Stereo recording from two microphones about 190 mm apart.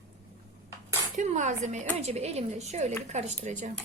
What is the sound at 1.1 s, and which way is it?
Speech, 40° right (ahead or behind).